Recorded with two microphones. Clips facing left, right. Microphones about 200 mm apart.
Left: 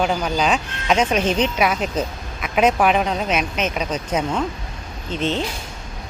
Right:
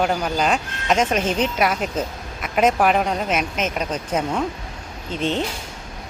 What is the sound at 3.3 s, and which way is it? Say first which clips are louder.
Speech: left 1 dB; 45° right (ahead or behind).